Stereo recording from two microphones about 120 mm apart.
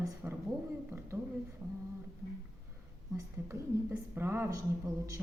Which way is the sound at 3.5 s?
20° right (ahead or behind).